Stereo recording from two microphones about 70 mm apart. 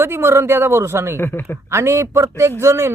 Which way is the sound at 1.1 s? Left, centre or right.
Left.